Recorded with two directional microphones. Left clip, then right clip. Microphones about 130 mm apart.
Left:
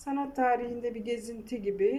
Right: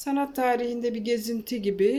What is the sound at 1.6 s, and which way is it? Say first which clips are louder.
Speech: right 4 dB; 30° right (ahead or behind).